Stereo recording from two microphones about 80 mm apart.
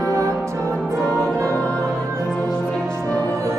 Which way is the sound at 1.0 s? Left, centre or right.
Centre.